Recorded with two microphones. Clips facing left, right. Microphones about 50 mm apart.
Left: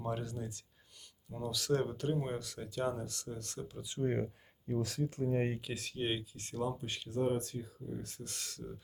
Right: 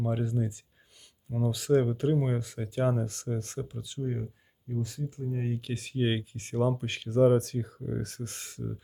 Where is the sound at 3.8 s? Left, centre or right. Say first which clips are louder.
Left 3 dB; left.